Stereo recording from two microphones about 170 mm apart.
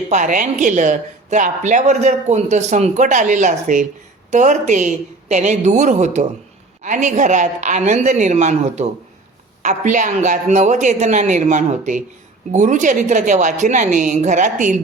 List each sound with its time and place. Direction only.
0.1 s a woman's voice: 50° right (ahead or behind)